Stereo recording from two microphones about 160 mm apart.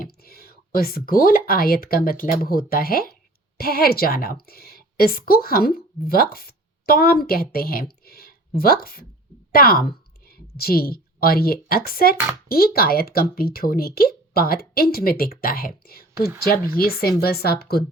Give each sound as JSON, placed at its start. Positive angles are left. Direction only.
{"t": 0.0, "sound": "a woman's voice", "side_deg": 70}